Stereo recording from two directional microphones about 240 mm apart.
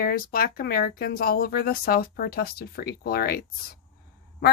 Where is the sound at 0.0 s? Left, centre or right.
Left.